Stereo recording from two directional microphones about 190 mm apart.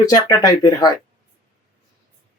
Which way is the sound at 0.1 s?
20° left (ahead or behind).